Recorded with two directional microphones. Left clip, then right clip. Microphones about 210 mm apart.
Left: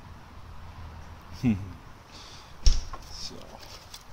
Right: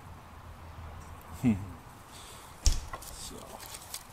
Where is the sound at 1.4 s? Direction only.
30° left (ahead or behind).